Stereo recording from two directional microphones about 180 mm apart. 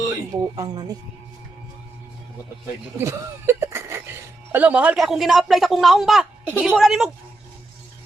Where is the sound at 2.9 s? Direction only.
15° right (ahead or behind).